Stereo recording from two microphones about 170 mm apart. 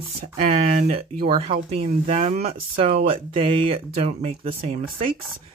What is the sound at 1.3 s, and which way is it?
Speech, 35° right (ahead or behind).